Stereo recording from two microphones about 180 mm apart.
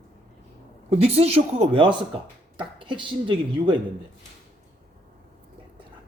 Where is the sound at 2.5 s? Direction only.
25° right (ahead or behind).